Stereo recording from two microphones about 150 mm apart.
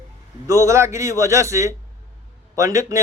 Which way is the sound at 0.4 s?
20° right (ahead or behind).